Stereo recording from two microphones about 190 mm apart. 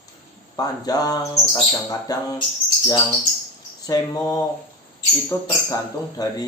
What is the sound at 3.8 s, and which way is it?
Speech, 20° left (ahead or behind).